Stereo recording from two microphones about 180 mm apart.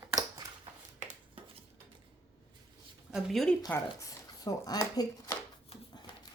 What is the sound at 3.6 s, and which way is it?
Speech, 20° left (ahead or behind).